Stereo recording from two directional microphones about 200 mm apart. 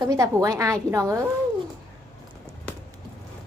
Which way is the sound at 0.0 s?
15° right (ahead or behind).